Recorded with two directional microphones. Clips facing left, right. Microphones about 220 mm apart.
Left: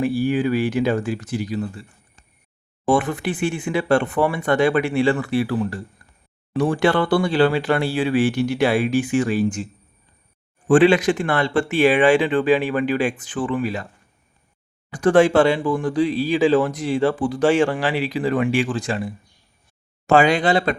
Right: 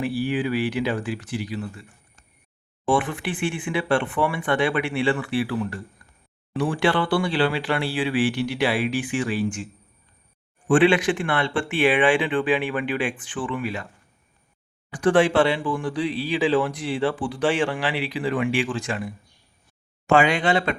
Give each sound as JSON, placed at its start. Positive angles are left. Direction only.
{"t": 0.0, "sound": "speech", "side_deg": 45}
{"t": 2.8, "sound": "speech", "side_deg": 40}
{"t": 10.7, "sound": "speech", "side_deg": 40}
{"t": 14.8, "sound": "speech", "side_deg": 40}